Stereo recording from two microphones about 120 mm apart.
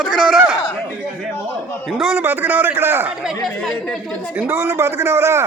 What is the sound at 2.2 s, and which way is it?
Speech, 15° right (ahead or behind).